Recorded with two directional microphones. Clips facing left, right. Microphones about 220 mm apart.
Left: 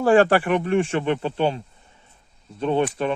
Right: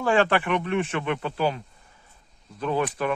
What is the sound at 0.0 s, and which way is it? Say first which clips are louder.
Speech: left 6 dB; 40° left (ahead or behind).